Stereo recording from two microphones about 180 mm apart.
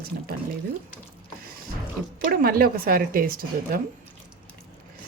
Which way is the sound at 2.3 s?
55° right (ahead or behind).